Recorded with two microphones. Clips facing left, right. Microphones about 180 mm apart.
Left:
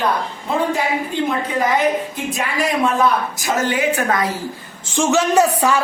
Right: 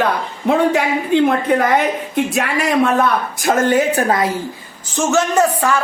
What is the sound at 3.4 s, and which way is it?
Speech, 55° right (ahead or behind).